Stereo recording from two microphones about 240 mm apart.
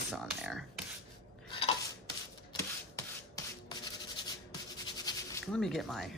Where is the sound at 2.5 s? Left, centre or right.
Centre.